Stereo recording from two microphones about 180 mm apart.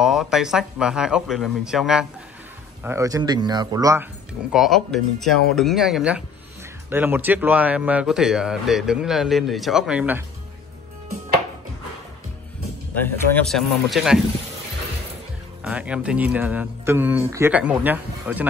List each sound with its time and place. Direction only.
0.0 s a man's voice: centre (ahead or behind)
2.8 s speech: 15° right (ahead or behind)
4.5 s a man's voice: centre (ahead or behind)
13.0 s a man's voice: centre (ahead or behind)
15.6 s speech: 5° right (ahead or behind)